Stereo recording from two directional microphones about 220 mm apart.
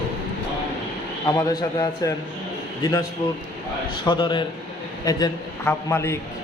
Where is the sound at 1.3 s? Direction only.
15° left (ahead or behind).